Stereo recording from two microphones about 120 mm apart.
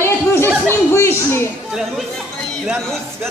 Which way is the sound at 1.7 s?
Centre (ahead or behind).